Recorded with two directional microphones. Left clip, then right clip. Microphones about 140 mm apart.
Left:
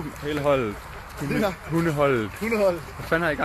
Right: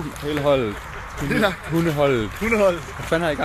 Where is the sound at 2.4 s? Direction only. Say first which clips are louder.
Right 4 dB; 25° left (ahead or behind).